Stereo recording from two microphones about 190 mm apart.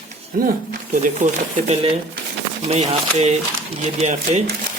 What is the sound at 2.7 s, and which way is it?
Speech, 35° right (ahead or behind).